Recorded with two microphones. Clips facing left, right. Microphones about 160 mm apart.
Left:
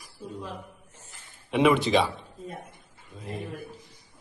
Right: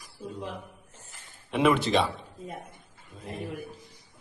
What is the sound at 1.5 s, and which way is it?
Speech, centre (ahead or behind).